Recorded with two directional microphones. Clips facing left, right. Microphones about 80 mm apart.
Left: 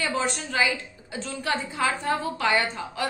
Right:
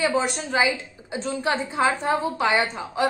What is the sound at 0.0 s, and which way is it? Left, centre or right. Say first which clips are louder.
A woman's voice: right 4 dB; centre.